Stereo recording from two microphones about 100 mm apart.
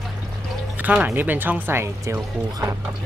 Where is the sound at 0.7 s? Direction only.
15° right (ahead or behind).